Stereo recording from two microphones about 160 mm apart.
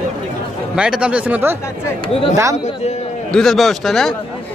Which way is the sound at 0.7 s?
5° right (ahead or behind).